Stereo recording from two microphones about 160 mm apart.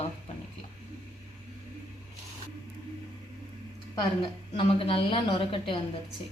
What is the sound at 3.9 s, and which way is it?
A woman's voice, 30° left (ahead or behind).